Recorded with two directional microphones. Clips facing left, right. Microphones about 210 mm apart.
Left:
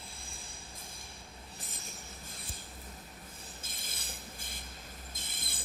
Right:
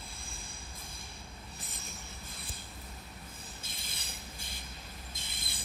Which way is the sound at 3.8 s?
50° left (ahead or behind).